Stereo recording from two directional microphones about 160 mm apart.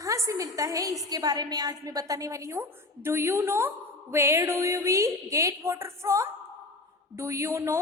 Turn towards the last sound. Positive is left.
turn(degrees=-20)  # may be behind; listen again after turning